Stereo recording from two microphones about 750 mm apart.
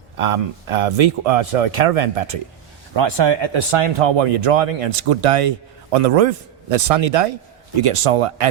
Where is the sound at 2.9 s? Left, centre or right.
Right.